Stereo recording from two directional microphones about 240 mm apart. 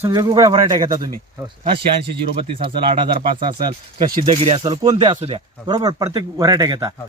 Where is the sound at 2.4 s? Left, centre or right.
Right.